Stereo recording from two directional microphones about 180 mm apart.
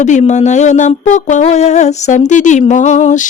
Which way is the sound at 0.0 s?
40° left (ahead or behind).